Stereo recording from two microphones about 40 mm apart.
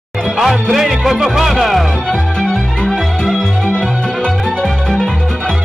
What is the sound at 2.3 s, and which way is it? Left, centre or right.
Music, left.